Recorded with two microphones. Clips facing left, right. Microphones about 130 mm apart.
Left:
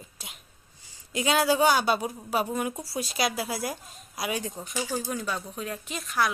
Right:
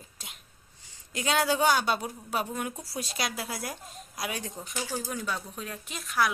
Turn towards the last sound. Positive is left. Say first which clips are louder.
# left 1 dB
turn(degrees=0)  # may be behind; listen again after turning